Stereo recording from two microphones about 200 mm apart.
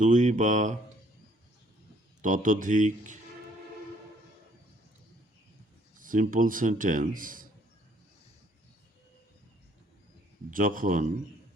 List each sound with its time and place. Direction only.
0.0 s speech: 40° right (ahead or behind)
2.2 s speech: 40° right (ahead or behind)
6.0 s speech: 40° right (ahead or behind)
10.5 s speech: 45° right (ahead or behind)